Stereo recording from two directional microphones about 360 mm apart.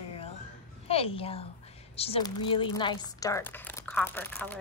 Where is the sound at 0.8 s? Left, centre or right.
Centre.